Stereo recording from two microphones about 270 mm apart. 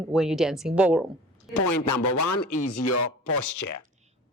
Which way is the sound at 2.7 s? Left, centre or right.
Left.